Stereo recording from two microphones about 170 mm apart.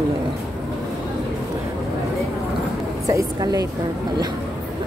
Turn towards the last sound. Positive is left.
turn(degrees=-20)  # may be behind; listen again after turning